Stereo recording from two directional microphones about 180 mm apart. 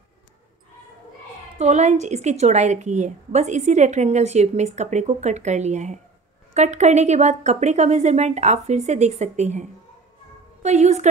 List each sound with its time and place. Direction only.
1.6 s a woman's voice: 40° right (ahead or behind)